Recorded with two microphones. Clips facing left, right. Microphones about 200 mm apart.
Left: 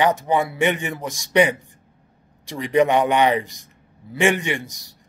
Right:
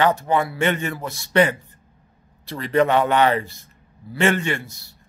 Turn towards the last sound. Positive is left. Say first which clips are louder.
# even
turn(degrees=15)  # may be behind; listen again after turning